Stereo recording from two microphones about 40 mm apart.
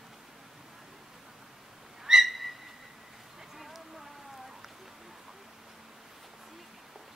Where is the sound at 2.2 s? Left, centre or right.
Centre.